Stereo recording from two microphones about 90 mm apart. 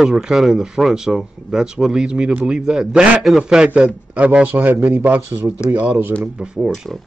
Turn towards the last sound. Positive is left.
turn(degrees=0)  # may be behind; listen again after turning